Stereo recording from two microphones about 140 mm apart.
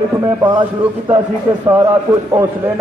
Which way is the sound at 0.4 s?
25° right (ahead or behind).